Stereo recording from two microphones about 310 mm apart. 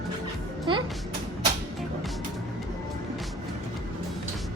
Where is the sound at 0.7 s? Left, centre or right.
Centre.